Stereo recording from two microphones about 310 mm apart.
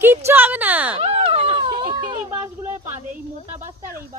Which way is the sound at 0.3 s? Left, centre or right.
Centre.